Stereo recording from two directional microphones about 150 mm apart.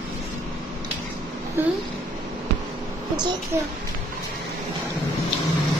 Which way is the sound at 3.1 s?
30° right (ahead or behind).